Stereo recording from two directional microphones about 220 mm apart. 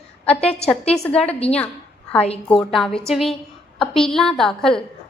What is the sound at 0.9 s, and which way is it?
Speech, 5° left (ahead or behind).